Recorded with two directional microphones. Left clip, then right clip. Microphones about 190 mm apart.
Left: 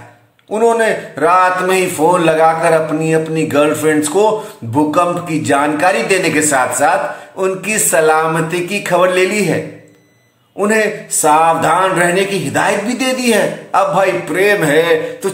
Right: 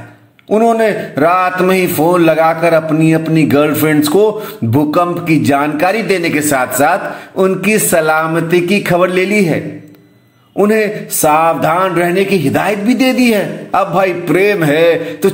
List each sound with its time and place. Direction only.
0.5 s a man's voice: 25° right (ahead or behind)
10.6 s a man's voice: 30° right (ahead or behind)